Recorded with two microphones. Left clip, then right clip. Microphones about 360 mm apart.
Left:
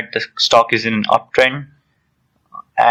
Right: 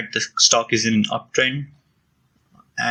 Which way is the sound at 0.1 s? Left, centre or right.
Centre.